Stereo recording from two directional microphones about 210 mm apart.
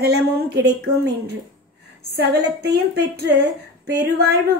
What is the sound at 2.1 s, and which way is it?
Speech, 50° right (ahead or behind).